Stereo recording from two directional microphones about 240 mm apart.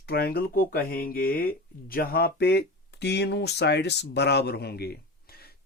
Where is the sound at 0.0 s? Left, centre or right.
Left.